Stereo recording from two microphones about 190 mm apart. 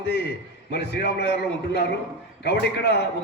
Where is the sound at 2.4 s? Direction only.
65° left (ahead or behind).